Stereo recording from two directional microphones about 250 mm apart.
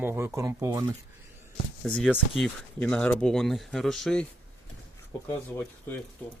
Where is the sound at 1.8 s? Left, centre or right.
Centre.